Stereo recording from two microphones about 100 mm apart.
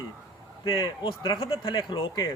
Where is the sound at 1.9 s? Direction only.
50° left (ahead or behind).